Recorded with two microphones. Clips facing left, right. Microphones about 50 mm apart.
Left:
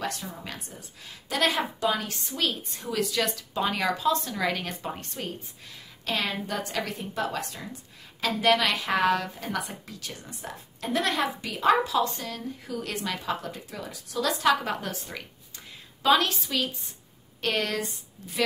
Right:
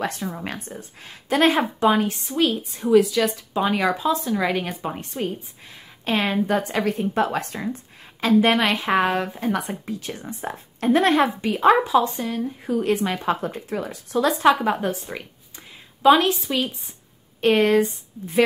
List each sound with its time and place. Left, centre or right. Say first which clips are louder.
0.0 s a woman's voice: right 6 dB; right
2.2 s a woman's voice: right 8 dB; centre
3.3 s a woman's voice: right 6 dB; centre
6.0 s a woman's voice: right 8 dB; right
11.8 s a woman's voice: right 6 dB; right
14.6 s a woman's voice: right 9 dB; right